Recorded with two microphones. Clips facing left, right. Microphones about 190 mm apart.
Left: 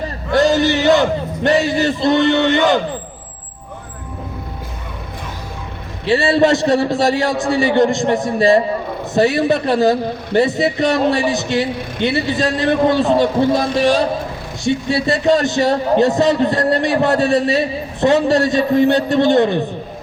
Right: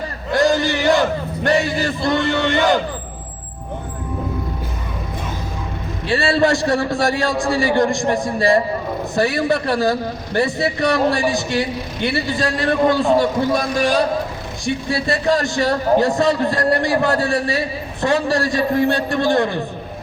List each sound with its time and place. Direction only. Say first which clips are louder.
0.3 s a man's voice: left 3 dB; 20° left (ahead or behind)
6.1 s a man's voice: left 3 dB; 20° left (ahead or behind)